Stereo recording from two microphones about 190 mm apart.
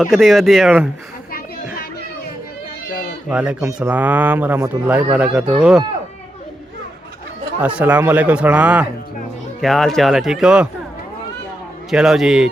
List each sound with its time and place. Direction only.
0.0 s speech: centre (ahead or behind)
1.3 s children playing: 50° left (ahead or behind)
3.2 s speech: 5° right (ahead or behind)
7.6 s speech: 10° right (ahead or behind)
11.9 s speech: centre (ahead or behind)